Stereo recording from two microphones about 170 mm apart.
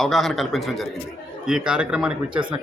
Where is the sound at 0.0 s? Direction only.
Centre (ahead or behind).